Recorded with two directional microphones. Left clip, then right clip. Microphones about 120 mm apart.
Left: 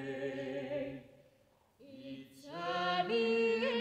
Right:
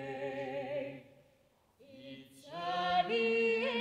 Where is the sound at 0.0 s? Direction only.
20° right (ahead or behind).